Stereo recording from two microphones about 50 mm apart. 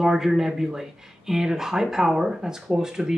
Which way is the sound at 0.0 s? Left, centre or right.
Centre.